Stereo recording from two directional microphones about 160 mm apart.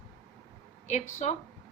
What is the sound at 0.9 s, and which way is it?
Speech, 45° left (ahead or behind).